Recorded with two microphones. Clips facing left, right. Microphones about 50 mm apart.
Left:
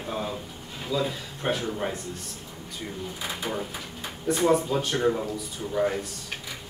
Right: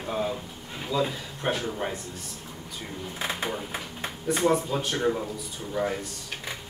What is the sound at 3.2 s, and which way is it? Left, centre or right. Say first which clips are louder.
Speech: right 7 dB; right.